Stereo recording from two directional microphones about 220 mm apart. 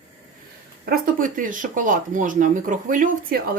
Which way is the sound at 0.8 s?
40° right (ahead or behind).